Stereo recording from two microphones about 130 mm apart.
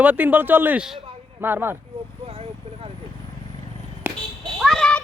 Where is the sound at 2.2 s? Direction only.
50° right (ahead or behind).